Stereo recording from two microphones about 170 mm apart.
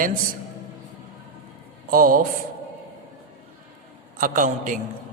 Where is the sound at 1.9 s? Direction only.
55° right (ahead or behind).